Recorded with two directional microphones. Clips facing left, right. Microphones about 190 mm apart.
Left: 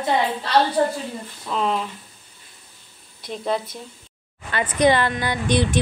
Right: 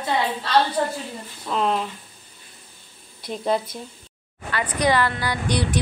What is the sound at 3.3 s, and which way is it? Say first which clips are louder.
Speech: right 1 dB; centre (ahead or behind).